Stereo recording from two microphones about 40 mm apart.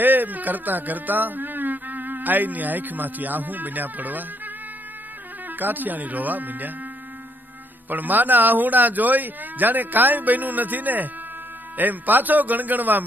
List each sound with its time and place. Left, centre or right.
0.0 s speech: right
5.6 s speech: right
7.9 s speech: right